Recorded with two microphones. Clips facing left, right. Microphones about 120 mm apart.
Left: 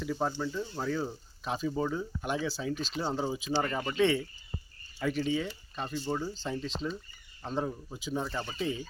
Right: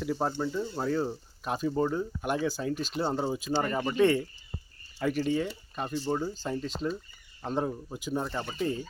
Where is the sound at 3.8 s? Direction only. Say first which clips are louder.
Right 3 dB; 20° right (ahead or behind).